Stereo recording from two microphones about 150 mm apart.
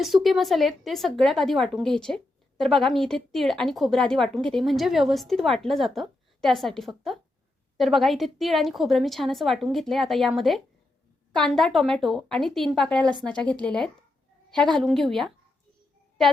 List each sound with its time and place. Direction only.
0.0 s a woman's voice: centre (ahead or behind)